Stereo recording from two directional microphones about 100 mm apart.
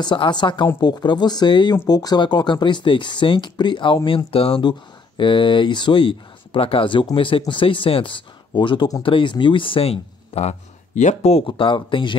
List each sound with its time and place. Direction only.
0.0 s speech: 50° left (ahead or behind)
4.3 s speech: 70° left (ahead or behind)
4.6 s speech: 50° left (ahead or behind); by 10.5 s 90° left
11.2 s speech: 70° left (ahead or behind); by 12.2 s 55° left (ahead or behind)